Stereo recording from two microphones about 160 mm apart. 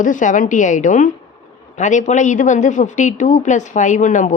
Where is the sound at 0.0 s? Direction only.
55° left (ahead or behind).